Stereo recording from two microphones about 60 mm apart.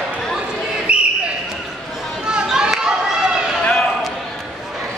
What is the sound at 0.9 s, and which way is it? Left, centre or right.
Basketball bounce, centre.